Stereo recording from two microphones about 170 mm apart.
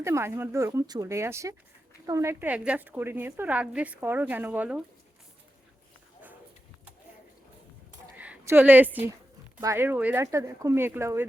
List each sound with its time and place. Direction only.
0.0 s a woman's voice: 15° right (ahead or behind)
8.1 s a sound: 10° right (ahead or behind)
9.6 s a woman's voice: 15° right (ahead or behind)